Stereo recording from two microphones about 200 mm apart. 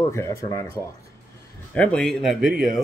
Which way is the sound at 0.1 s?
15° left (ahead or behind).